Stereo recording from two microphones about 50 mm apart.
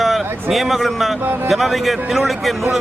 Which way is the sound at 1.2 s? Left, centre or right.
Right.